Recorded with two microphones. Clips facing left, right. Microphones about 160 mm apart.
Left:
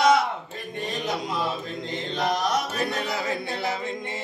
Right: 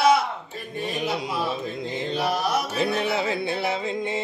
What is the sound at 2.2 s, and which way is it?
Mantra, 5° right (ahead or behind).